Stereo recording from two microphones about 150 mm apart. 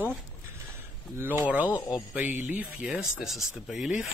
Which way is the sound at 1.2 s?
15° right (ahead or behind).